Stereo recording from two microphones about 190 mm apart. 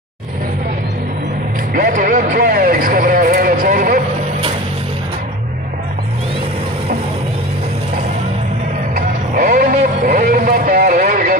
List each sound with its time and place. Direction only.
1.7 s vehicle: 45° right (ahead or behind)
8.9 s vehicle: 45° right (ahead or behind)